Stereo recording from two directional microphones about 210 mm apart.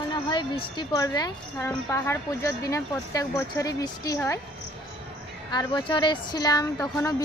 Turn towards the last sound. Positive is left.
turn(degrees=15)  # may be behind; listen again after turning